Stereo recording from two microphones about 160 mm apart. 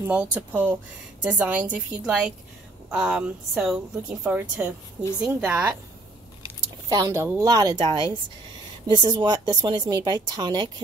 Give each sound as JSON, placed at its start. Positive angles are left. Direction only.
{"t": 0.0, "sound": "a woman's voice", "side_deg": -10}
{"t": 6.9, "sound": "speech", "side_deg": -20}